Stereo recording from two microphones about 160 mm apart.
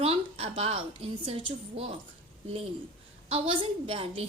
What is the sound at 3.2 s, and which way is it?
A woman's voice, 35° right (ahead or behind).